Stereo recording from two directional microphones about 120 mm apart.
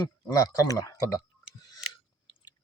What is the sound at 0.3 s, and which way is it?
Speech, 30° left (ahead or behind).